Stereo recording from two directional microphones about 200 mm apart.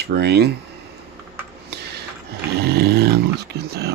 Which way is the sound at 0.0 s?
55° right (ahead or behind).